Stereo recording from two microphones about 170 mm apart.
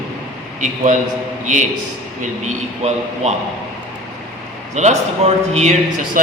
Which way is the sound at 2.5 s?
40° right (ahead or behind).